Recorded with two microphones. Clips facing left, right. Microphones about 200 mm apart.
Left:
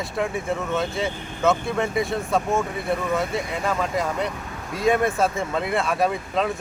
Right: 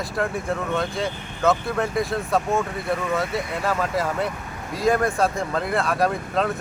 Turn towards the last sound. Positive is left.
turn(degrees=0)  # may be behind; listen again after turning